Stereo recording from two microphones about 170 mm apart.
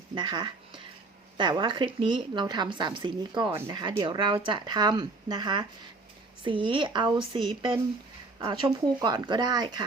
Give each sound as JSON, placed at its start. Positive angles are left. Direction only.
{"t": 0.1, "sound": "a woman's voice", "side_deg": -25}